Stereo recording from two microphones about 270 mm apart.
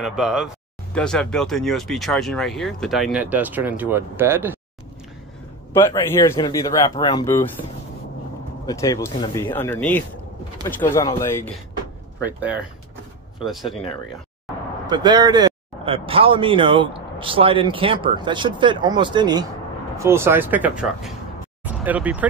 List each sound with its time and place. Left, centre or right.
0.0 s speech: centre
5.7 s speech: centre
8.6 s speech: centre
12.2 s speech: centre
14.9 s speech: centre